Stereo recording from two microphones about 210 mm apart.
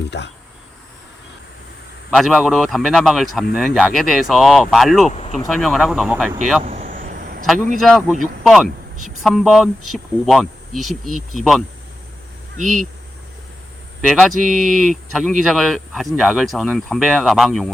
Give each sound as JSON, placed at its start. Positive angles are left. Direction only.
{"t": 0.1, "sound": "speech", "side_deg": 55}
{"t": 2.1, "sound": "speech", "side_deg": 0}
{"t": 5.1, "sound": "speech", "side_deg": 30}
{"t": 5.5, "sound": "speech", "side_deg": 0}
{"t": 6.8, "sound": "vehicle", "side_deg": -40}
{"t": 7.8, "sound": "speech", "side_deg": 5}
{"t": 12.5, "sound": "speech", "side_deg": -35}
{"t": 14.0, "sound": "speech", "side_deg": 0}